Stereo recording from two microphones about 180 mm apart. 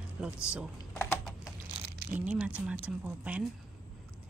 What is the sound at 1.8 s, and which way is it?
Crumpling, 60° right (ahead or behind).